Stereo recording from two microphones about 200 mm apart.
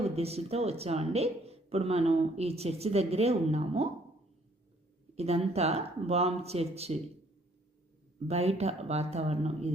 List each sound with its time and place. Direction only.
0.2 s speech: 30° right (ahead or behind)
5.1 s speech: 30° right (ahead or behind)
8.3 s speech: 30° right (ahead or behind)